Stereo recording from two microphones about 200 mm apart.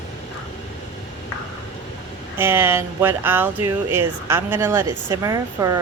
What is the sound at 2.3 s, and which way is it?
Speech, 10° right (ahead or behind).